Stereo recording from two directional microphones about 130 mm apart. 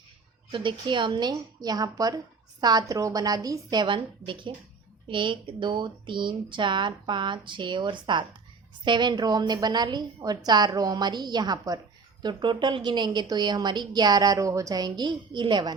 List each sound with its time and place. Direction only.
0.5 s a woman's voice: 40° right (ahead or behind)